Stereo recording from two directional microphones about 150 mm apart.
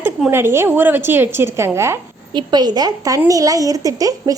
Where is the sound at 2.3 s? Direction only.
30° right (ahead or behind).